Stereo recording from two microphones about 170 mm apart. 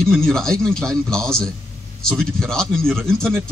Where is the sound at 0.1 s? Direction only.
5° left (ahead or behind).